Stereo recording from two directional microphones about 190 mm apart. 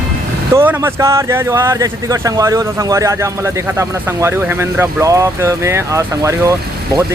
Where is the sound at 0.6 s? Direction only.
10° right (ahead or behind).